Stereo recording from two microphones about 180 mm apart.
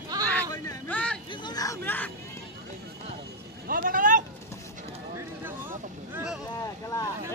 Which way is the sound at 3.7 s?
50° right (ahead or behind).